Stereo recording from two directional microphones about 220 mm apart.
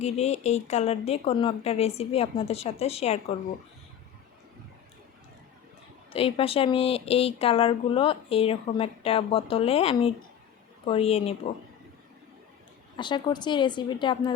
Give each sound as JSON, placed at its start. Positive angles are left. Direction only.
{"t": 0.0, "sound": "speech", "side_deg": 30}
{"t": 6.1, "sound": "speech", "side_deg": 25}
{"t": 13.0, "sound": "speech", "side_deg": 20}